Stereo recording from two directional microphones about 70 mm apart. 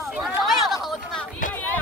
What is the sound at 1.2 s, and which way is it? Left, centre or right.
Run, left.